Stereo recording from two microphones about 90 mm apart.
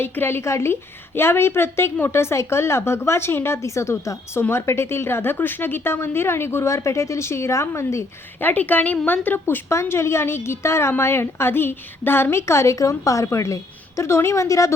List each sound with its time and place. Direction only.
0.0 s a woman's voice: 25° left (ahead or behind)